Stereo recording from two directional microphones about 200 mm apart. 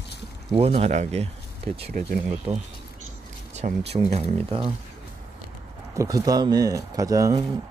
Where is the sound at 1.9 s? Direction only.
45° right (ahead or behind).